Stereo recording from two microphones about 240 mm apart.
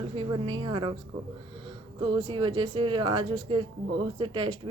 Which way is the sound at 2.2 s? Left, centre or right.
Centre.